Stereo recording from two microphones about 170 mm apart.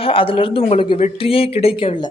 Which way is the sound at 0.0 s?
30° left (ahead or behind).